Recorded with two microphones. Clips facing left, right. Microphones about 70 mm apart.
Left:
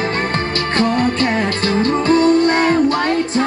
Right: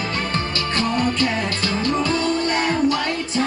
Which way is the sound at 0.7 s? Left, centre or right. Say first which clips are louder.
Left 5 dB; left.